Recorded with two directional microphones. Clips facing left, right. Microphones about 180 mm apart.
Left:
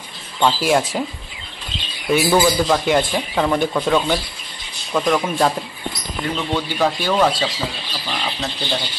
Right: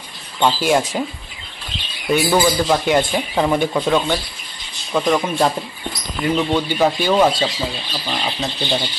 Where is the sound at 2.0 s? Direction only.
5° left (ahead or behind).